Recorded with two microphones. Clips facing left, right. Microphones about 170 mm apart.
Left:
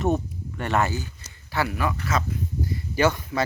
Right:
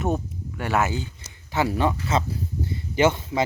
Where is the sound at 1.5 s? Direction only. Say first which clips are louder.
Right 3 dB; 20° right (ahead or behind).